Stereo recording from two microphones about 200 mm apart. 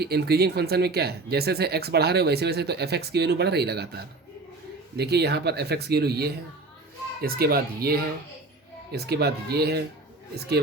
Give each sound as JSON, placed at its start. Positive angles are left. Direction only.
{"t": 0.0, "sound": "speech", "side_deg": -55}